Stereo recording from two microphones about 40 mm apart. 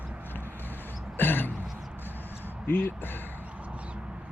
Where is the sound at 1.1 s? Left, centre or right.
Left.